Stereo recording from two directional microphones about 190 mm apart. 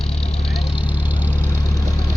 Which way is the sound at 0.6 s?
25° left (ahead or behind).